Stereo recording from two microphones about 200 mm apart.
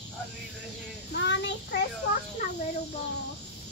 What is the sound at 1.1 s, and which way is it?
Child singing, 60° left (ahead or behind).